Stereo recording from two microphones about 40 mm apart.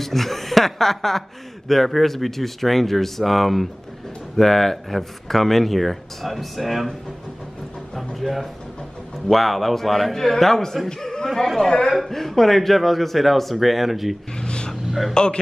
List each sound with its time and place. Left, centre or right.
0.0 s a man's voice: centre
11.4 s speech: centre
14.3 s vehicle: left
15.2 s speech: centre